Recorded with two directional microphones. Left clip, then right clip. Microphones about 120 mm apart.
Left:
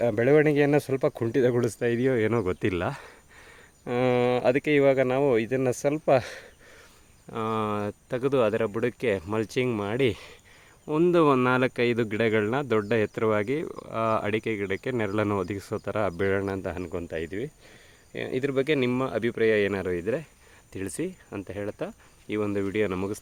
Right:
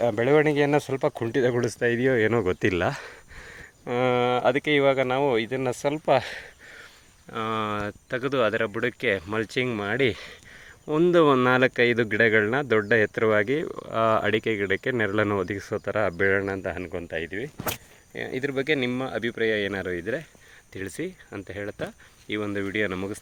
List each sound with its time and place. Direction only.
0.0 s speech: 45° left (ahead or behind); by 3.6 s 5° right (ahead or behind)
3.8 s speech: 35° left (ahead or behind)
10.8 s speech: 20° left (ahead or behind)
13.7 s speech: centre (ahead or behind); by 23.2 s 45° left (ahead or behind)